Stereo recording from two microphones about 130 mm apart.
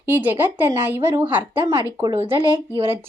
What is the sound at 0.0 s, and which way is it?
Speech, 15° right (ahead or behind).